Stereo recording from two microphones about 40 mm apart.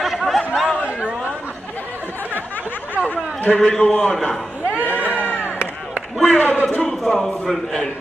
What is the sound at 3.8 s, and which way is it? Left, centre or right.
Speech, left.